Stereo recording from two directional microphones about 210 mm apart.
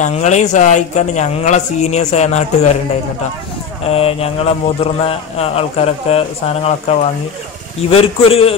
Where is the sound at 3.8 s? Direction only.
30° left (ahead or behind).